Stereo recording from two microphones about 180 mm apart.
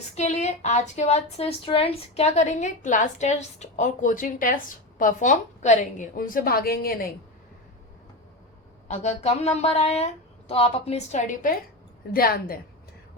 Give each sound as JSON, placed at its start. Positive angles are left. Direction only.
{"t": 0.1, "sound": "a woman's voice", "side_deg": 40}
{"t": 8.9, "sound": "a woman's voice", "side_deg": 35}
{"t": 12.1, "sound": "a woman's voice", "side_deg": 55}